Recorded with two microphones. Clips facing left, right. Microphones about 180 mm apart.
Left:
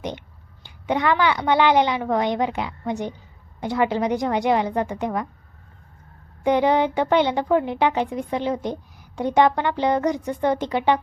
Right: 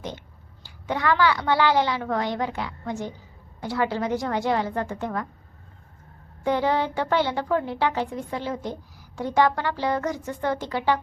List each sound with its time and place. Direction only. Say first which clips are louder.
0.0 s a child's voice: left 4 dB; 20° left (ahead or behind)
6.4 s a woman's voice: left 5 dB; 15° left (ahead or behind)